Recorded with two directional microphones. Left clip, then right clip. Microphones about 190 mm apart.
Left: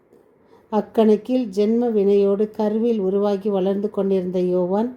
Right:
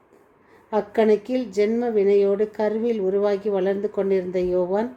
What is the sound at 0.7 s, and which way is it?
A woman's voice, 30° left (ahead or behind).